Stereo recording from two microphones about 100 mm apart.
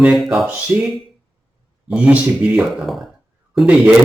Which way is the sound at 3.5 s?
10° right (ahead or behind).